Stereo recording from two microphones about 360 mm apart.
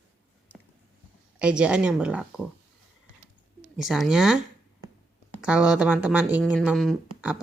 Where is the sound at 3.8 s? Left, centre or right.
Centre.